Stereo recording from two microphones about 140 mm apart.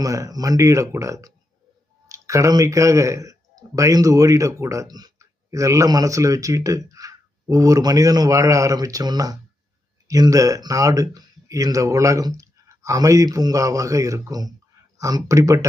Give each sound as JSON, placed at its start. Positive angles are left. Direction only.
{"t": 0.0, "sound": "speech", "side_deg": -25}